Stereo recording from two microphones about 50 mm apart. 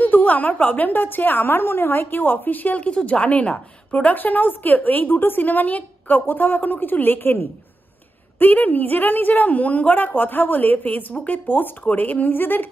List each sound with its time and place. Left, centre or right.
0.0 s a woman's voice: left
2.8 s a woman's voice: left
4.1 s a woman's voice: left